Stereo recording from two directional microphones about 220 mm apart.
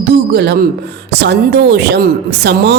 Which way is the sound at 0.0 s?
50° right (ahead or behind).